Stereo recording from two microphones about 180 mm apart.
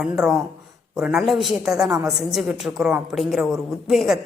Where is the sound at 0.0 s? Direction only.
Centre (ahead or behind).